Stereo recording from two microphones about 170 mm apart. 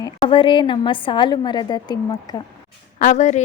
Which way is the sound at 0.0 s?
30° left (ahead or behind).